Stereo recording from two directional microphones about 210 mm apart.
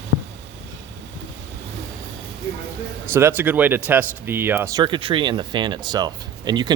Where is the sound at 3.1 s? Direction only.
10° right (ahead or behind).